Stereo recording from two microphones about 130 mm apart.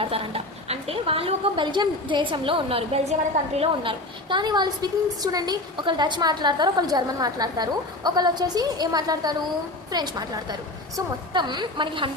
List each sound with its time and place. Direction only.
0.0 s a woman's voice: 45° right (ahead or behind)